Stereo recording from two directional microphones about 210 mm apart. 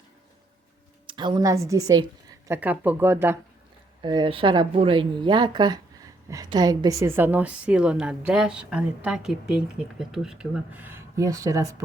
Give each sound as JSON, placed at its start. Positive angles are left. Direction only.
{"t": 1.0, "sound": "speech", "side_deg": -20}
{"t": 4.0, "sound": "speech", "side_deg": -20}